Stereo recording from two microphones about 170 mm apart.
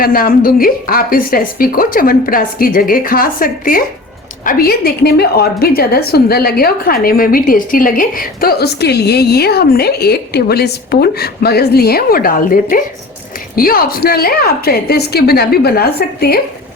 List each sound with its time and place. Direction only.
0.0 s a woman's voice: 60° left (ahead or behind)